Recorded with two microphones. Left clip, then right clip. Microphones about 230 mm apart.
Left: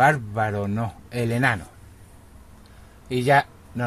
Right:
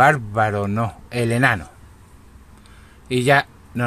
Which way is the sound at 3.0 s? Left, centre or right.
Centre.